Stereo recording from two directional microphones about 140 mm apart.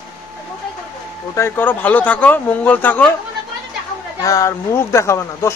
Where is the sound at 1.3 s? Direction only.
15° left (ahead or behind).